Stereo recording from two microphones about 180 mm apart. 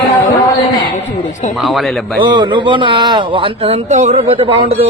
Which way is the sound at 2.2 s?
25° right (ahead or behind).